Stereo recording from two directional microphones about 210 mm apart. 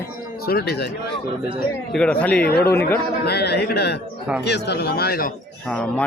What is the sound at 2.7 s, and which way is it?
Speech, 10° left (ahead or behind).